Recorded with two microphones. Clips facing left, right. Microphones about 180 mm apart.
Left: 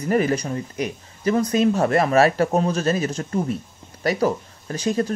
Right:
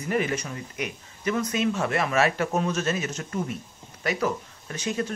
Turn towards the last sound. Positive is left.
turn(degrees=35)  # may be behind; listen again after turning